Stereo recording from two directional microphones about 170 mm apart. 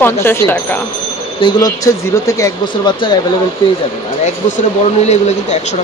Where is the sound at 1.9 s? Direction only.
20° left (ahead or behind).